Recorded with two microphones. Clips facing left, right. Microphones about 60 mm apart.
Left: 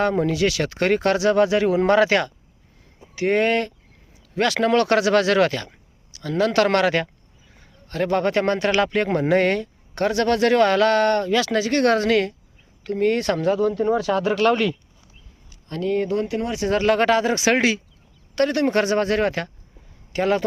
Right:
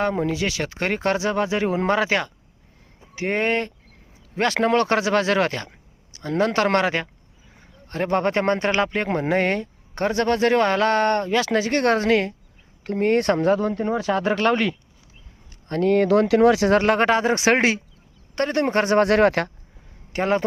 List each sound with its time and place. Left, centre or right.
0.0 s speech: centre
1.9 s speech: centre
12.8 s speech: right
15.7 s speech: right
16.0 s speech: right
16.7 s speech: right
18.3 s speech: right
19.0 s speech: right
20.1 s speech: right